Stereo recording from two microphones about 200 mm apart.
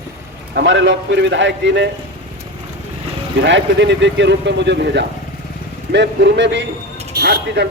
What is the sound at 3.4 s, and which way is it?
Speech, 60° right (ahead or behind).